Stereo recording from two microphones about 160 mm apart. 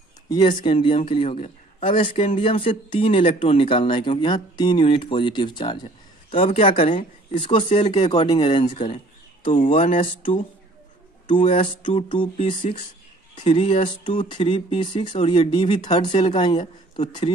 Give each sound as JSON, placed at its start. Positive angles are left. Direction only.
{"t": 0.3, "sound": "speech", "side_deg": 30}
{"t": 8.7, "sound": "speech", "side_deg": 45}
{"t": 11.2, "sound": "speech", "side_deg": 35}